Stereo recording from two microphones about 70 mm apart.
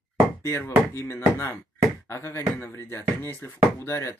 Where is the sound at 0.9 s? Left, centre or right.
Left.